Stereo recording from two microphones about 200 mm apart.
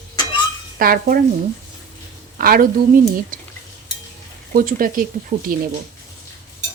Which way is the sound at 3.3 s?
45° right (ahead or behind).